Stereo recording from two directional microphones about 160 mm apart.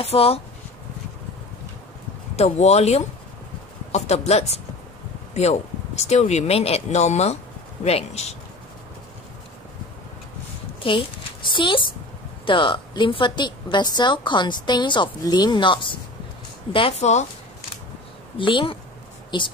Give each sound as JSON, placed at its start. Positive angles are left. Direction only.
{"t": 0.0, "sound": "speech", "side_deg": 40}
{"t": 2.3, "sound": "speech", "side_deg": 40}
{"t": 10.8, "sound": "a woman's voice", "side_deg": 30}
{"t": 16.7, "sound": "speech", "side_deg": 40}
{"t": 18.4, "sound": "a woman's voice", "side_deg": 30}